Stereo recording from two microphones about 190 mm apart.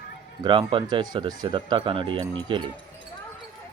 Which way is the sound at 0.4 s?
25° right (ahead or behind).